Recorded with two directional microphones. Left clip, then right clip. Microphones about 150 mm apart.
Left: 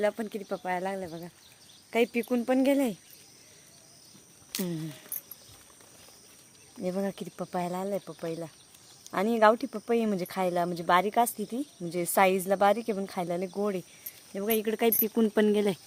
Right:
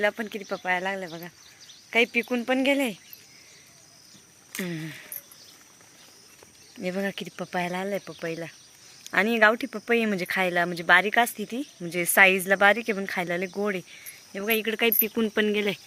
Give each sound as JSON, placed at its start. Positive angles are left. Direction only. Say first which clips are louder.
{"t": 0.1, "sound": "speech", "louder": "right 2 dB", "side_deg": 5}
{"t": 1.9, "sound": "speech", "louder": "right 4 dB", "side_deg": 15}
{"t": 4.5, "sound": "speech", "louder": "right 2 dB", "side_deg": 15}
{"t": 6.9, "sound": "speech", "louder": "right 5 dB", "side_deg": 5}
{"t": 14.3, "sound": "speech", "louder": "right 3 dB", "side_deg": 20}